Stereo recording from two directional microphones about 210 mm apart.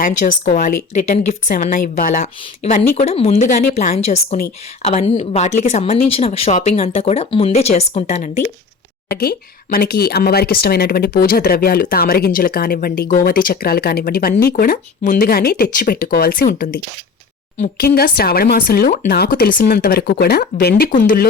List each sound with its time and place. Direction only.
0.0 s a woman's voice: 40° left (ahead or behind)
9.0 s speech: 45° left (ahead or behind)